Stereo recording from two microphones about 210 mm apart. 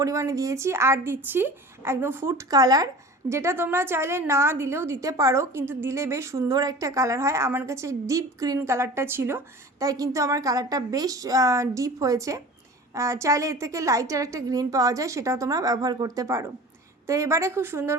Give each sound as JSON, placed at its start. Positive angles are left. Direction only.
{"t": 0.0, "sound": "a woman's voice", "side_deg": -15}